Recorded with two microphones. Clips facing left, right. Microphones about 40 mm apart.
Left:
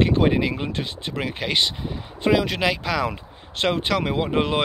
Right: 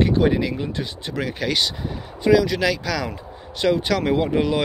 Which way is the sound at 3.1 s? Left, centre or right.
Left.